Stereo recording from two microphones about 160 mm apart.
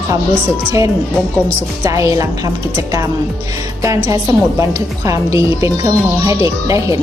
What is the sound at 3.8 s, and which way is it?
Speech, 20° right (ahead or behind).